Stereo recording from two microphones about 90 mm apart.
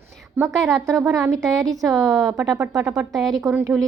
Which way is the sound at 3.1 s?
Centre (ahead or behind).